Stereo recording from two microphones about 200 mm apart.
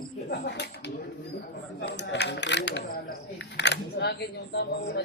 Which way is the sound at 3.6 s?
60° left (ahead or behind).